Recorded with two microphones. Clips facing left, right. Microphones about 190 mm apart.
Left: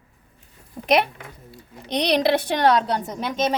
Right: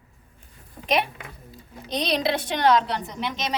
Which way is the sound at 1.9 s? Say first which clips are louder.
Left 5 dB; 70° left (ahead or behind).